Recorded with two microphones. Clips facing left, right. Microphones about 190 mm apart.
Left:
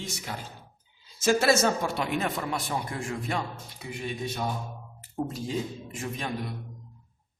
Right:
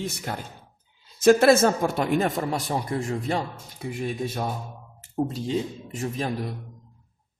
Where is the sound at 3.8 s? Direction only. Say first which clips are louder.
Right 6 dB; 50° right (ahead or behind).